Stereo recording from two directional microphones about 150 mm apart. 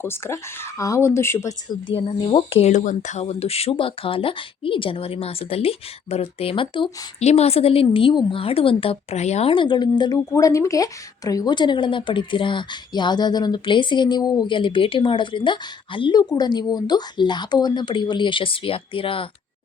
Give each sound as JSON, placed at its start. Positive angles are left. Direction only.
{"t": 0.0, "sound": "speech", "side_deg": 15}
{"t": 1.9, "sound": "speech", "side_deg": 40}
{"t": 7.2, "sound": "speech", "side_deg": 45}